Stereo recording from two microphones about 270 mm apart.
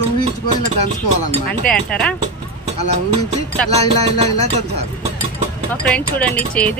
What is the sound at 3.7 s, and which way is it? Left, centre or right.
Speech, right.